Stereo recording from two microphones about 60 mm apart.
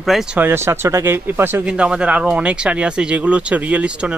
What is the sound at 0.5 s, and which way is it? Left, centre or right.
Speech, right.